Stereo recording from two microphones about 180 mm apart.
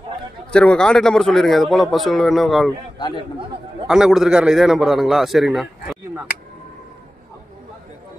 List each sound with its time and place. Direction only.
0.5 s speech: 5° left (ahead or behind)
3.0 s a man's voice: 25° left (ahead or behind)
3.8 s speech: 5° right (ahead or behind)
5.9 s speech: 10° right (ahead or behind)